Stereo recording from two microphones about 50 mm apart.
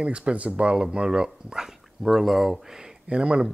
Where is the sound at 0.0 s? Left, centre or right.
Right.